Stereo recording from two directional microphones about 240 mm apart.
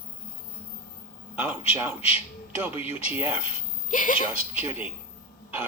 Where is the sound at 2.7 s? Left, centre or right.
Left.